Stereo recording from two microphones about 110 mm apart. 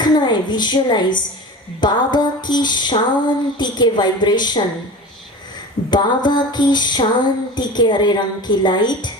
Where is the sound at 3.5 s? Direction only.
40° left (ahead or behind).